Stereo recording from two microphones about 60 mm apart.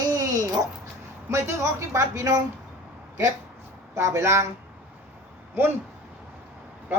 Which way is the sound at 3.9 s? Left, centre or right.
Right.